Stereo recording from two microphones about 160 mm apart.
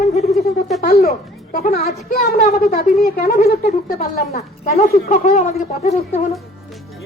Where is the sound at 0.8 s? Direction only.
70° left (ahead or behind).